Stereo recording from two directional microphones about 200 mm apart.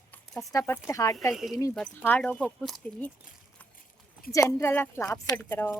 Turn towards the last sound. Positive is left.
turn(degrees=10)  # may be behind; listen again after turning